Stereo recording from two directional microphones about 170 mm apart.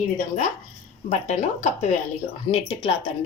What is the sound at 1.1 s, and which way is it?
Speech, 45° left (ahead or behind).